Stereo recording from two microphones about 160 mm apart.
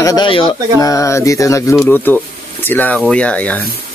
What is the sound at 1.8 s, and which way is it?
Speech, 10° left (ahead or behind).